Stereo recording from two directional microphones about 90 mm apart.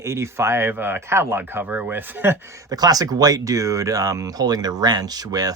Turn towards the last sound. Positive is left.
turn(degrees=-45)  # may be behind; listen again after turning